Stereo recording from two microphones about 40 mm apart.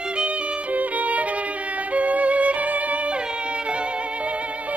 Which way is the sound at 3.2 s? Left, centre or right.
Right.